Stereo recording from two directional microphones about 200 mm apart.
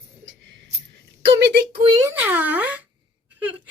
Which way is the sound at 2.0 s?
10° right (ahead or behind).